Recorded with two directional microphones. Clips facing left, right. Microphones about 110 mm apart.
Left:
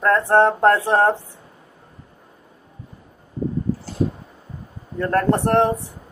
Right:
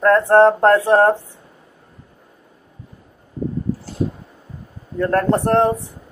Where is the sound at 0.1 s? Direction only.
20° right (ahead or behind).